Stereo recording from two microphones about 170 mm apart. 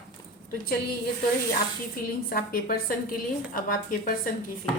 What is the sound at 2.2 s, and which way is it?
A woman's voice, 60° left (ahead or behind).